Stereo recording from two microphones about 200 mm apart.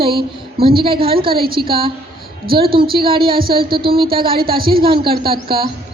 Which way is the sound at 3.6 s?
50° right (ahead or behind).